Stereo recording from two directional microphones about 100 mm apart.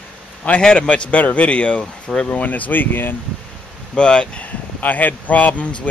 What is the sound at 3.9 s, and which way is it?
Speech, 10° left (ahead or behind).